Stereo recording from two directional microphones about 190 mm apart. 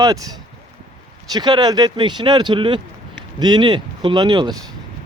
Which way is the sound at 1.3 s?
25° right (ahead or behind).